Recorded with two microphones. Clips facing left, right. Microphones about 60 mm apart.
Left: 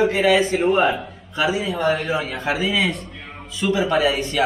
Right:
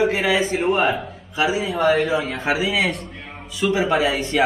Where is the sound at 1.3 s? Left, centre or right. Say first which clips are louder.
Right 1 dB; centre.